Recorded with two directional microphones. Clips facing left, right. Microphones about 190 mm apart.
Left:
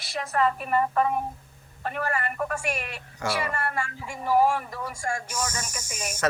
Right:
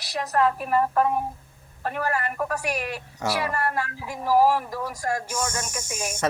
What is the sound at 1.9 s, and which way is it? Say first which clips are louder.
Speech: right 2 dB; centre (ahead or behind).